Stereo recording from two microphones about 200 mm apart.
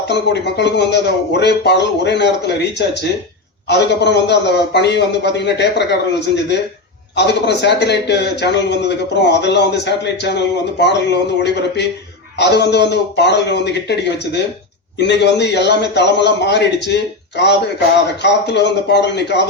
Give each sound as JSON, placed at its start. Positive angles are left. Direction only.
{"t": 0.1, "sound": "a man's voice", "side_deg": 60}